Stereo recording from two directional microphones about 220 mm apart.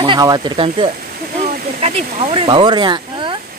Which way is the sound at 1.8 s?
25° right (ahead or behind).